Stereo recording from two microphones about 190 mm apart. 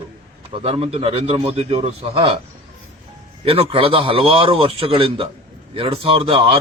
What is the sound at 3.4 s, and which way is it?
A man's voice, 30° right (ahead or behind).